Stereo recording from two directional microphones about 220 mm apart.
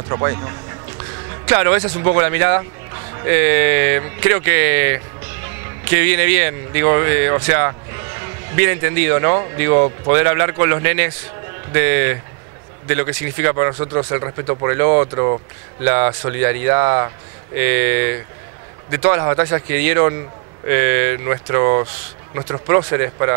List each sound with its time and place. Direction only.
0.1 s speech: 20° right (ahead or behind)
1.5 s speech: 15° right (ahead or behind)